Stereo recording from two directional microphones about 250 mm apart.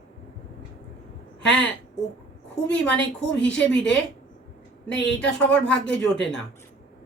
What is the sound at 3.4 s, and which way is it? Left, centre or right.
Speech, centre.